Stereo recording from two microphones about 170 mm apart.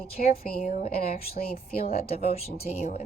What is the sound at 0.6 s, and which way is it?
Speech, 50° left (ahead or behind).